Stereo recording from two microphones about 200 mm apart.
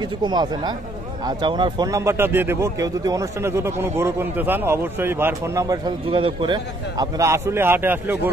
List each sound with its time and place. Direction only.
0.0 s speech: 20° right (ahead or behind)